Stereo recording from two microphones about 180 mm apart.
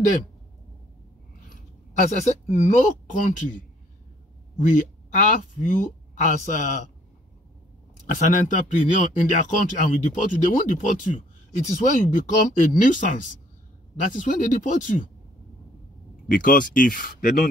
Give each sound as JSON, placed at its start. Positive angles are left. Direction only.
{"t": 1.5, "sound": "speech", "side_deg": 40}
{"t": 4.6, "sound": "speech", "side_deg": 45}
{"t": 8.5, "sound": "speech", "side_deg": 45}
{"t": 16.3, "sound": "speech", "side_deg": 50}